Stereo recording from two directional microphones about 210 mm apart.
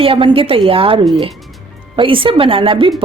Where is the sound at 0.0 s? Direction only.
25° right (ahead or behind).